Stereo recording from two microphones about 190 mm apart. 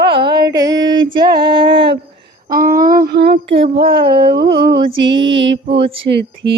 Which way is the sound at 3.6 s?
30° right (ahead or behind).